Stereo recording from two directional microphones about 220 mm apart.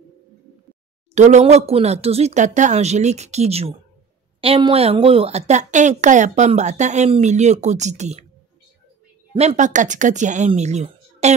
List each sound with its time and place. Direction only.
1.1 s a woman's voice: 30° right (ahead or behind)
9.3 s a woman's voice: 25° right (ahead or behind)